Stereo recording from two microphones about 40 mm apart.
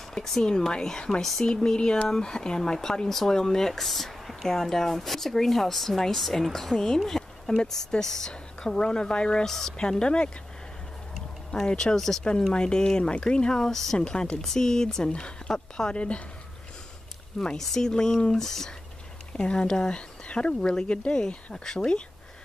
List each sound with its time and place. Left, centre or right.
0.1 s speech: centre
9.4 s speech: centre
9.8 s speech: left
11.5 s speech: centre
12.5 s speech: left
13.6 s speech: centre
13.9 s speech: centre
15.0 s speech: left
17.6 s speech: centre
19.3 s speech: left